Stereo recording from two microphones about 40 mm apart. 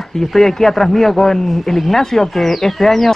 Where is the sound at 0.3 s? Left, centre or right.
Centre.